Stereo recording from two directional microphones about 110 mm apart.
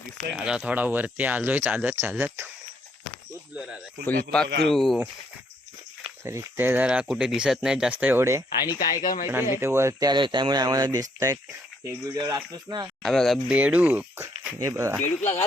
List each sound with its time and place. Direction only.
0.3 s speech: 10° right (ahead or behind)
3.5 s speech: 10° right (ahead or behind)
4.0 s a man's voice: 10° left (ahead or behind)
6.2 s speech: 20° right (ahead or behind)
6.8 s speech: 5° right (ahead or behind)
8.2 s speech: 25° right (ahead or behind)
8.5 s speech: 40° left (ahead or behind)
9.2 s speech: 20° right (ahead or behind)
10.1 s speech: 45° right (ahead or behind)
13.0 s speech: 5° left (ahead or behind)
13.5 s speech: 15° right (ahead or behind)
14.6 s speech: 25° right (ahead or behind)